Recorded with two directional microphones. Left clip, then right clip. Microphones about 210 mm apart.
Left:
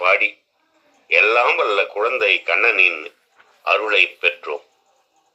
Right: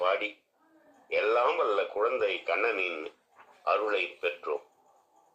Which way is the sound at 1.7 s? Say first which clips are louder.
Left 9 dB; 35° left (ahead or behind).